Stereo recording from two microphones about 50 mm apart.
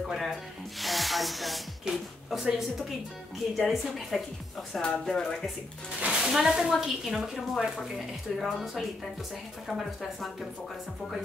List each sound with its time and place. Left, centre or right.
0.1 s speech: centre
3.5 s speech: centre
5.9 s speech: right
6.2 s speech: centre